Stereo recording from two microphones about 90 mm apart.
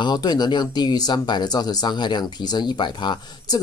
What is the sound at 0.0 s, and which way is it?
Speech, 50° left (ahead or behind).